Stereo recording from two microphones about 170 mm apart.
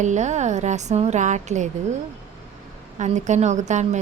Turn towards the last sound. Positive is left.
turn(degrees=-45)  # may be behind; listen again after turning